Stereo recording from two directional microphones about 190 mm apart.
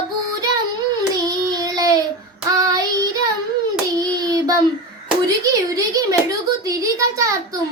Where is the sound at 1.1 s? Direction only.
20° right (ahead or behind).